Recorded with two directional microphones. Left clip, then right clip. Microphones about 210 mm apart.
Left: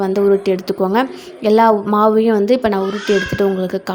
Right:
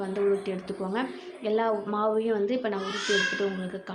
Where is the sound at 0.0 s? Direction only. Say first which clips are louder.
Left 13 dB; 50° left (ahead or behind).